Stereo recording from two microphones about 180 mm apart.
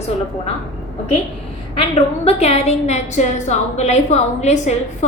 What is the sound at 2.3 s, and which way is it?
A woman's voice, 35° left (ahead or behind).